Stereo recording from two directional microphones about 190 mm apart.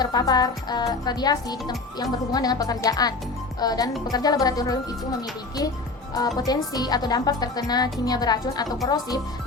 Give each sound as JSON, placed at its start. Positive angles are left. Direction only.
{"t": 0.0, "sound": "speech", "side_deg": 20}
{"t": 6.1, "sound": "speech", "side_deg": 20}